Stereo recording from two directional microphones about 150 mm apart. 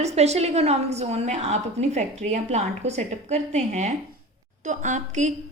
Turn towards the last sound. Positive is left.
turn(degrees=-55)  # may be behind; listen again after turning